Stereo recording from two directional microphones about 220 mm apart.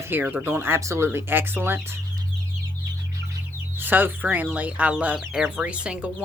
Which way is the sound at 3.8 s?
10° right (ahead or behind).